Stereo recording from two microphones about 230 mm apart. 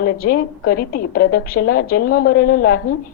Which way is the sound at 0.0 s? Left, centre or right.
Left.